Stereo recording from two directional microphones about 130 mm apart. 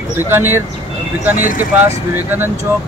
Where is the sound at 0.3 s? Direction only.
15° right (ahead or behind).